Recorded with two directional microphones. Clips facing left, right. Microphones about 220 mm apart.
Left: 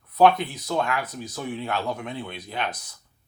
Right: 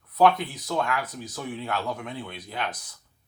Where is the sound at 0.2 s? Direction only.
25° left (ahead or behind).